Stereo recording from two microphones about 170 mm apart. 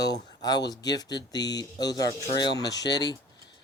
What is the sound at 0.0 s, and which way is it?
Speech, 25° left (ahead or behind).